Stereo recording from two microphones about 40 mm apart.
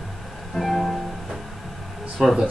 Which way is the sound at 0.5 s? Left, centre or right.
Centre.